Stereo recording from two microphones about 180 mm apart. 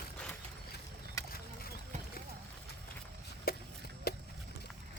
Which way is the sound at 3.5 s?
55° left (ahead or behind).